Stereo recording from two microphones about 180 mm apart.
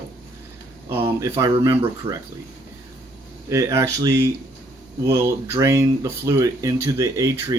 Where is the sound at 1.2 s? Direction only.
20° right (ahead or behind).